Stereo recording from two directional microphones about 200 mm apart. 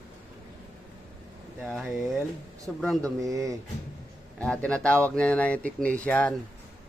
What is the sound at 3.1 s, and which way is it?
Speech, 15° right (ahead or behind).